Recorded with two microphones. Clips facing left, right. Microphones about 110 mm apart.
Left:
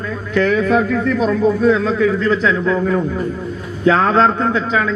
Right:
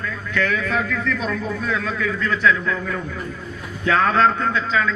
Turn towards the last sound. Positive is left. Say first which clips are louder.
# left 4 dB
turn(degrees=20)  # may be behind; listen again after turning